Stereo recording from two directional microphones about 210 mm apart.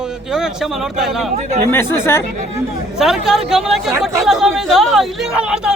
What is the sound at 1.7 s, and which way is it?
Speech, 10° left (ahead or behind).